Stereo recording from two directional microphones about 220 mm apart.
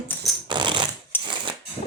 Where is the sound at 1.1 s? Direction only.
10° left (ahead or behind).